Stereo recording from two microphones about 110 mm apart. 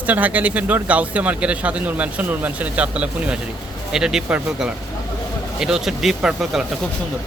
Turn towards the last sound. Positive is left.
turn(degrees=-5)  # may be behind; listen again after turning